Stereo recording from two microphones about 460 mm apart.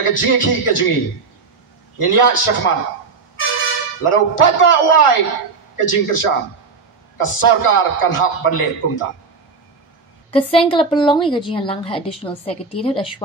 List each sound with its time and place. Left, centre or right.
0.0 s a man's voice: left
2.0 s a man's voice: left
4.0 s a man's voice: left
10.3 s a woman's voice: centre